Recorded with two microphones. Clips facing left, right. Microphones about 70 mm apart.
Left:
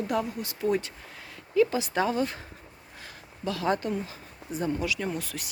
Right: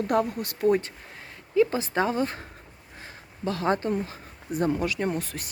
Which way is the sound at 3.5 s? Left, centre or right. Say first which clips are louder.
Right 2 dB; right.